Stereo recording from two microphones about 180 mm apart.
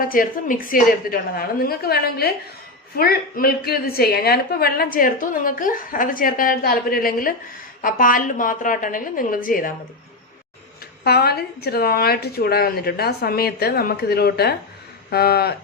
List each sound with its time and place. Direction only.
0.0 s a woman's voice: 50° left (ahead or behind)
11.0 s a woman's voice: 60° left (ahead or behind)